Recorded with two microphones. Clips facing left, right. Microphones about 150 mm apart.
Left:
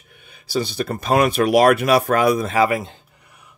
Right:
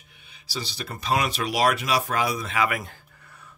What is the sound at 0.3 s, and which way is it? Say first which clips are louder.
Speech: left 12 dB; 50° left (ahead or behind).